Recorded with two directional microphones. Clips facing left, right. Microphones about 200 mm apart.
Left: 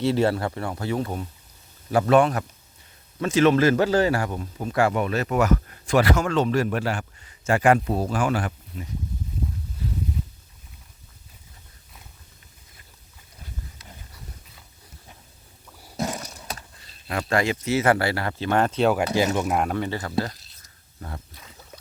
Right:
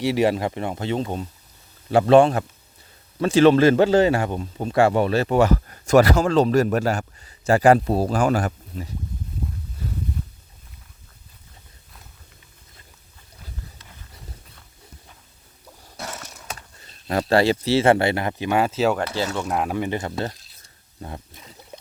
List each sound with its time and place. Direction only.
0.0 s speech: 15° right (ahead or behind); by 5.7 s 30° right (ahead or behind)
5.8 s a man's voice: 45° right (ahead or behind)
15.8 s a sound: 15° left (ahead or behind)
17.1 s speech: 35° right (ahead or behind); by 18.9 s 5° right (ahead or behind)
18.9 s speech: 15° left (ahead or behind)
19.5 s speech: centre (ahead or behind)
19.7 s speech: 15° right (ahead or behind)
21.0 s a sound: 20° right (ahead or behind)